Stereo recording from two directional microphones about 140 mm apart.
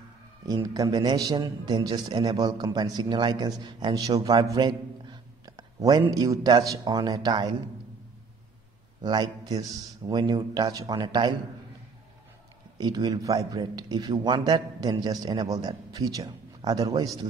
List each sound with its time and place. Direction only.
0.5 s a man's voice: 30° right (ahead or behind)
9.0 s a man's voice: 30° right (ahead or behind)
12.7 s a man's voice: 30° right (ahead or behind)